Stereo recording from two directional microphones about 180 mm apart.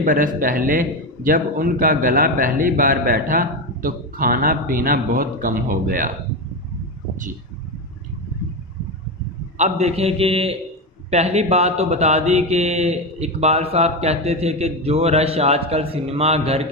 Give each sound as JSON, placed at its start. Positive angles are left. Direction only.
{"t": 0.0, "sound": "a man's voice", "side_deg": -50}
{"t": 9.6, "sound": "speech", "side_deg": -35}